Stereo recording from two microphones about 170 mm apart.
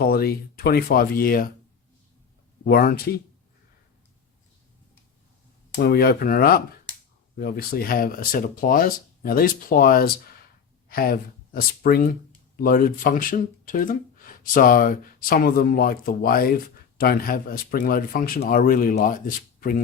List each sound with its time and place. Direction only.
0.0 s speech: 65° left (ahead or behind)
2.6 s speech: 60° left (ahead or behind)
5.7 s speech: 65° left (ahead or behind)